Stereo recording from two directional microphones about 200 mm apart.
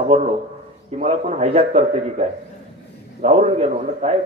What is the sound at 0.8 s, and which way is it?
A man's voice, 30° right (ahead or behind).